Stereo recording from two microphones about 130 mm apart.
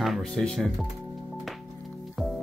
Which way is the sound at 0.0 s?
Centre (ahead or behind).